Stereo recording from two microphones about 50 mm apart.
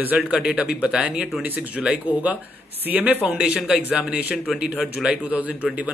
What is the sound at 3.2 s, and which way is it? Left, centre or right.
A man's voice, centre.